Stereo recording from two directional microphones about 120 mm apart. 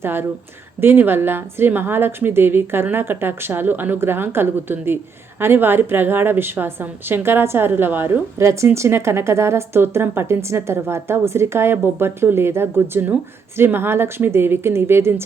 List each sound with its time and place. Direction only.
0.0 s a woman's voice: 20° right (ahead or behind)